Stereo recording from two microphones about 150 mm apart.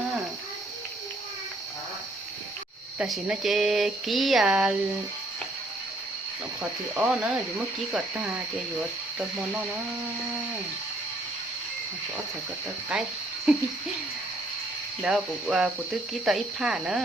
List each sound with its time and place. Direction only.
3.0 s speech: 5° right (ahead or behind)
6.9 s speech: 5° right (ahead or behind)
12.9 s speech: 5° right (ahead or behind)
15.0 s speech: 5° right (ahead or behind)